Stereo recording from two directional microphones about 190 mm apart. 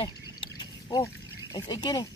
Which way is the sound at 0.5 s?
20° left (ahead or behind).